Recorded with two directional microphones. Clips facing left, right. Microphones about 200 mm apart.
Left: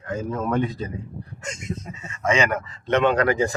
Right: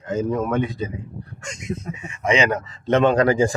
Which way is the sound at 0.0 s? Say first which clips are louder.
Right 4 dB; 20° right (ahead or behind).